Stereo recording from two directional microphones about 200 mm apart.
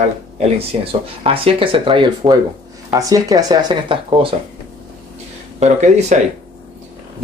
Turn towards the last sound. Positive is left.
turn(degrees=-35)  # may be behind; listen again after turning